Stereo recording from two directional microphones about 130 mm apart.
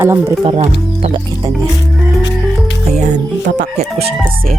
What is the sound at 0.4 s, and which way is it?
Speech, 45° right (ahead or behind).